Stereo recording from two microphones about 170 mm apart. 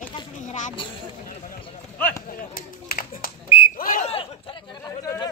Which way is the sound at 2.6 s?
60° left (ahead or behind).